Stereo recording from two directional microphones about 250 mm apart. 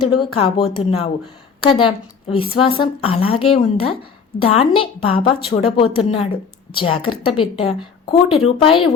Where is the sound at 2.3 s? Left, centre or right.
Left.